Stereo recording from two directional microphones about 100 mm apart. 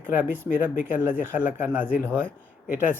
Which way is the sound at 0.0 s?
20° right (ahead or behind).